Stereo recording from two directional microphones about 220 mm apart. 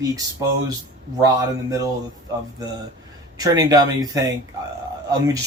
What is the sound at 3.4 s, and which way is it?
Speech, 15° right (ahead or behind).